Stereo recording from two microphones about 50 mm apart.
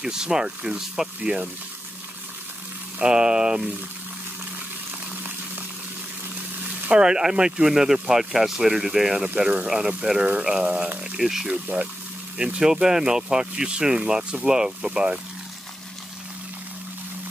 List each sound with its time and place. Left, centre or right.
0.0 s speech: centre
3.0 s speech: centre
6.9 s speech: centre
11.5 s speech: right